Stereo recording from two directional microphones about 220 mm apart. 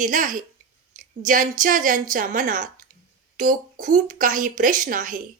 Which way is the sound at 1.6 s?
35° right (ahead or behind).